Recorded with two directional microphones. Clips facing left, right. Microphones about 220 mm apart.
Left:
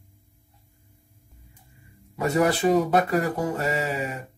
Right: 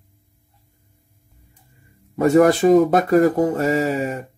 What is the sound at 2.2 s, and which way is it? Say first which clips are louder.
Speech: right 8 dB; 50° right (ahead or behind).